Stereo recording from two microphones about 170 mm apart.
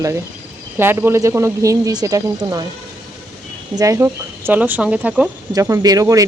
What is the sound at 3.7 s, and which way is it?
Speech, 20° right (ahead or behind).